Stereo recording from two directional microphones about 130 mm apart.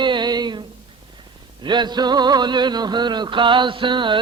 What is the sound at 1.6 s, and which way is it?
Music, 35° right (ahead or behind).